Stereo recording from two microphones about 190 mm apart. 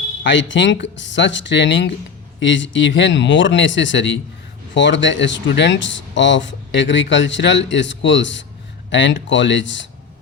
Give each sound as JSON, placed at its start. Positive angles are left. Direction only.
{"t": 0.2, "sound": "speech", "side_deg": 75}